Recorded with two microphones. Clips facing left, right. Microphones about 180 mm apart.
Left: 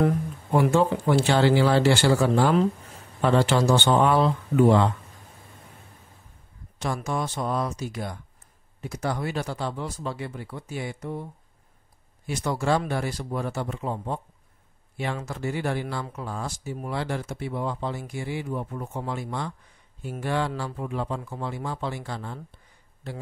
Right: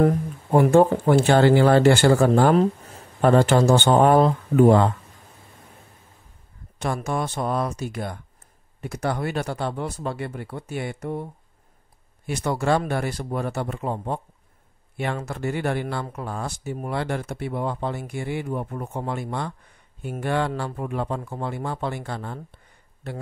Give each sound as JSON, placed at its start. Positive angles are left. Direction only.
{"t": 0.0, "sound": "speech", "side_deg": -45}
{"t": 6.8, "sound": "speech", "side_deg": -55}
{"t": 12.3, "sound": "speech", "side_deg": -60}
{"t": 15.2, "sound": "speech", "side_deg": -60}